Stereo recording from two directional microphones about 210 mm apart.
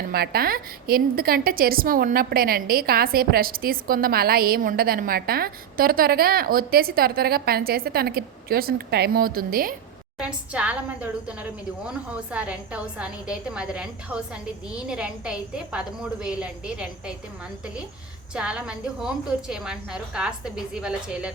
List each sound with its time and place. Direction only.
0.1 s a woman's voice: 45° right (ahead or behind)
10.2 s a woman's voice: 5° right (ahead or behind)
18.3 s a woman's voice: 5° right (ahead or behind)